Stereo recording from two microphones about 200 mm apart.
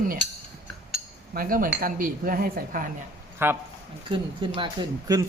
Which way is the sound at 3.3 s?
10° right (ahead or behind).